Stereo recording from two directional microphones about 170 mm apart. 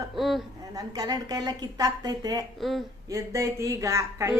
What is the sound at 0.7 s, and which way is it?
A woman's voice, 20° right (ahead or behind).